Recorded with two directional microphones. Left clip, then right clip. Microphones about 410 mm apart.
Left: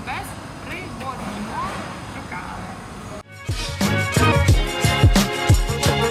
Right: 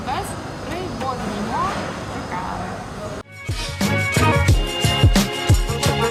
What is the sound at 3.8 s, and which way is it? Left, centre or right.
Music, centre.